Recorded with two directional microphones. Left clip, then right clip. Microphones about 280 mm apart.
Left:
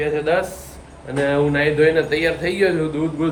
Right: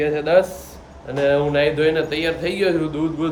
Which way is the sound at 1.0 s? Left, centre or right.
Centre.